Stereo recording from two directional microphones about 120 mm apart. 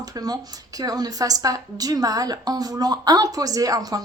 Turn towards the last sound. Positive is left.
turn(degrees=-30)  # may be behind; listen again after turning